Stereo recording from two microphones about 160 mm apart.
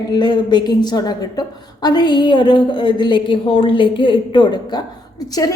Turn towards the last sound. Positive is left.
turn(degrees=25)  # may be behind; listen again after turning